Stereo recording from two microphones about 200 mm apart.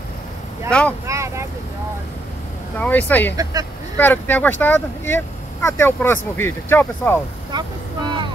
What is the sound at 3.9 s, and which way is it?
Speech, 10° left (ahead or behind).